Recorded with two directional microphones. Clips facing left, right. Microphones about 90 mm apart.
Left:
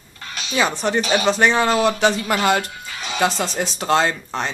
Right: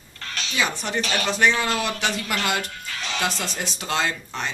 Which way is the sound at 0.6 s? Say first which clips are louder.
Left 6 dB; 35° left (ahead or behind).